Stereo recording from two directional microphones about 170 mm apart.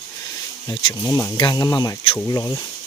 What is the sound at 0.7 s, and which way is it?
Speech, 25° left (ahead or behind).